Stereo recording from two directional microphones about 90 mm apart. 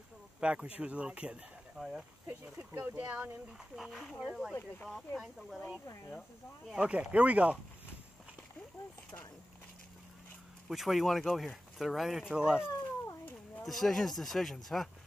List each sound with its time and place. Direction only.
0.4 s speech: 10° right (ahead or behind)
2.7 s speech: 30° right (ahead or behind)
3.0 s speech: 20° right (ahead or behind)
3.7 s speech: centre (ahead or behind)
6.7 s speech: 10° right (ahead or behind)
10.7 s speech: centre (ahead or behind)
12.6 s cat: 35° left (ahead or behind)
13.6 s speech: centre (ahead or behind)